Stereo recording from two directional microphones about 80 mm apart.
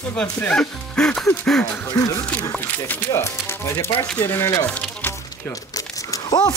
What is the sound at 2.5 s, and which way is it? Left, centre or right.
Speech, left.